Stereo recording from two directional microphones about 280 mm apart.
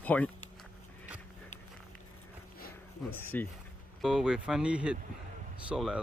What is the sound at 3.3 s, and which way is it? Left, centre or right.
Speech, centre.